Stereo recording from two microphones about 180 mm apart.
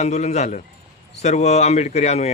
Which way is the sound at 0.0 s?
40° left (ahead or behind).